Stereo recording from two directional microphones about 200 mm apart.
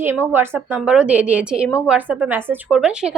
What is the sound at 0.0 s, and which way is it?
A woman's voice, 10° right (ahead or behind).